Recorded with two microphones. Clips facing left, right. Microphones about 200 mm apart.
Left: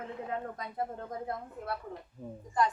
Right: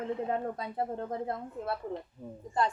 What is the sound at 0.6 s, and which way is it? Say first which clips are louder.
A woman's voice: right 3 dB; 30° right (ahead or behind).